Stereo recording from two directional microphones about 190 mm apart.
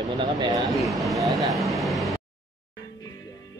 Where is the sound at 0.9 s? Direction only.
Centre (ahead or behind).